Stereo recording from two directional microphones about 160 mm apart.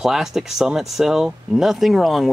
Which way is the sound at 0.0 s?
Centre (ahead or behind).